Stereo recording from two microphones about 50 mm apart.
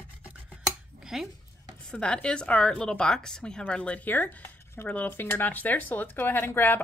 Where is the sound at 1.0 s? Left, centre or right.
Centre.